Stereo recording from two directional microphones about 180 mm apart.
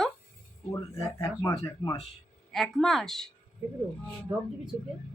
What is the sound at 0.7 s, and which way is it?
Speech, 20° left (ahead or behind).